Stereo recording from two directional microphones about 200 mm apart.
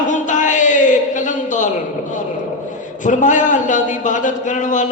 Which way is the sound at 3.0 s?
40° left (ahead or behind).